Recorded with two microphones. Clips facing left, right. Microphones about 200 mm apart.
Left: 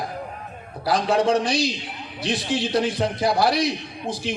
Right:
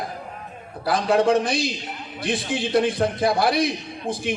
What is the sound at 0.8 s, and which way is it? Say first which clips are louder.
A man's voice: right 1 dB; 55° right (ahead or behind).